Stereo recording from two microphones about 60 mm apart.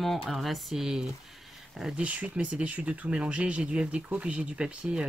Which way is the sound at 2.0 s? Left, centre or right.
Right.